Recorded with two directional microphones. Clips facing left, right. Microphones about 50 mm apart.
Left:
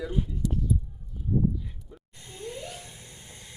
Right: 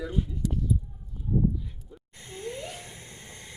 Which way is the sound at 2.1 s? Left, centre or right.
Right.